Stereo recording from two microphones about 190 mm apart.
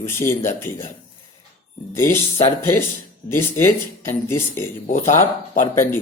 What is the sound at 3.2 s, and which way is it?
Speech, 25° left (ahead or behind).